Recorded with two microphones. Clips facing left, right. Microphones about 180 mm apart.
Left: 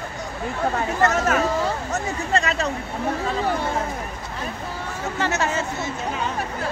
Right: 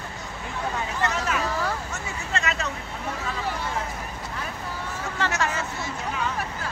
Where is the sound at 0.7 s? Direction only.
50° left (ahead or behind).